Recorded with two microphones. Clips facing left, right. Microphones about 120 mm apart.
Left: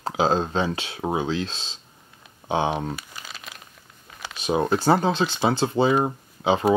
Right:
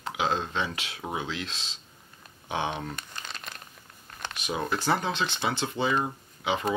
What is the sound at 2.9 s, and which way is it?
Crumpling, 5° left (ahead or behind).